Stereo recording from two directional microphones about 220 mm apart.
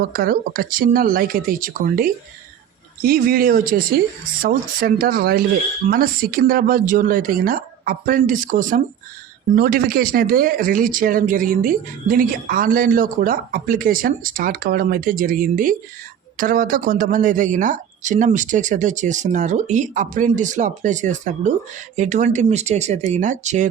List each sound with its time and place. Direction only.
0.1 s speech: 40° right (ahead or behind)